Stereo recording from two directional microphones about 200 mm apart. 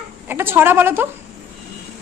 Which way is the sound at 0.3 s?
10° right (ahead or behind).